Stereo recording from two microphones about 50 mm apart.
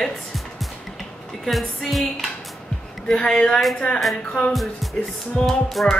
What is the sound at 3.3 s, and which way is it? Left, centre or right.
Music, centre.